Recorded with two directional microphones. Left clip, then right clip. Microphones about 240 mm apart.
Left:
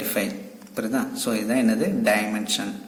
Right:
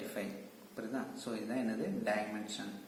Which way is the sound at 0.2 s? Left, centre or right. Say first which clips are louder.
Left 15 dB; left.